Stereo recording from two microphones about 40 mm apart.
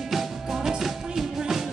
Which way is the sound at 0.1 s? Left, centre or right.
Centre.